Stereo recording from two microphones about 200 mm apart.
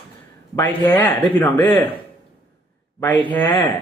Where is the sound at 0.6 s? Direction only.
20° left (ahead or behind).